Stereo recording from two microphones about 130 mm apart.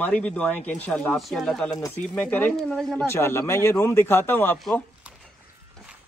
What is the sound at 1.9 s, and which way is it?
Speech, 15° left (ahead or behind).